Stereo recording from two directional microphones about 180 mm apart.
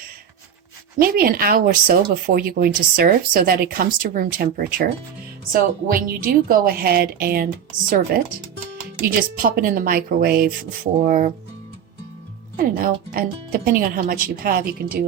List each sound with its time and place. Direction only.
0.9 s speech: 55° right (ahead or behind)
12.5 s speech: 55° right (ahead or behind)